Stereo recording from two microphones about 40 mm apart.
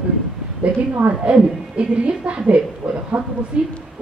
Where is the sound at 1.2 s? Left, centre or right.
Right.